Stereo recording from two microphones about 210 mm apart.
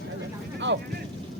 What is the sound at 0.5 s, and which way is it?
Vehicle, 55° right (ahead or behind).